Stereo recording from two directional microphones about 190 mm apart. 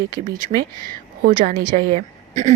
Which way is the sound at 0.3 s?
50° right (ahead or behind).